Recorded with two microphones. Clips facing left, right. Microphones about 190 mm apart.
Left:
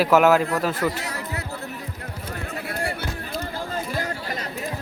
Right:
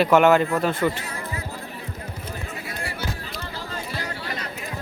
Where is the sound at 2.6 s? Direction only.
60° left (ahead or behind).